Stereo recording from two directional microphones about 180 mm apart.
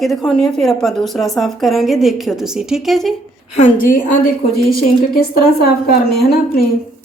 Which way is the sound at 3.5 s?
45° left (ahead or behind).